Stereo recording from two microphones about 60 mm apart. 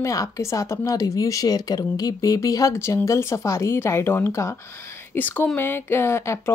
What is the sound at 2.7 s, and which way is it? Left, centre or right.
A woman's voice, left.